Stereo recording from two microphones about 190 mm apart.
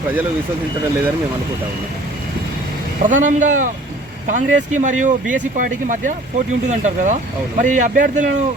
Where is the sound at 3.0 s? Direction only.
40° right (ahead or behind).